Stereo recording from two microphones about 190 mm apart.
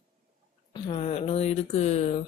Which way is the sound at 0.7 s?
30° left (ahead or behind).